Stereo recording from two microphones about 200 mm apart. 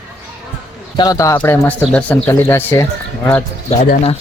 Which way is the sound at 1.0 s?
15° left (ahead or behind).